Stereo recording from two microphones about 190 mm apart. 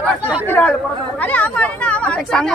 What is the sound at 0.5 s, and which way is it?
Speech, 10° left (ahead or behind).